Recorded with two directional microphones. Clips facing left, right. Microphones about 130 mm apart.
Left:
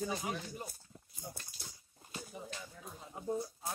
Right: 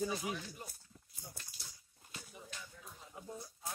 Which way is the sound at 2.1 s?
40° left (ahead or behind).